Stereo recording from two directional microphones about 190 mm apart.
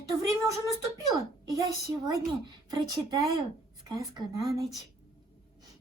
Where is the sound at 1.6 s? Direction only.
20° right (ahead or behind).